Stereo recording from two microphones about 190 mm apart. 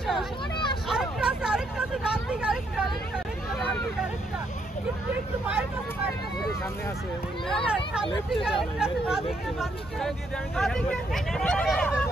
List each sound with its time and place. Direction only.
0.0 s hubbub: centre (ahead or behind)
0.8 s vehicle: 5° right (ahead or behind)
3.5 s hubbub: centre (ahead or behind)
7.4 s speech: centre (ahead or behind)